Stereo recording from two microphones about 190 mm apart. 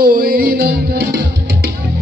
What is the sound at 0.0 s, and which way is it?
Music, 50° right (ahead or behind).